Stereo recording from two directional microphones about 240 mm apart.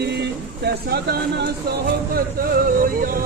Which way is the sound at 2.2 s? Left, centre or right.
Right.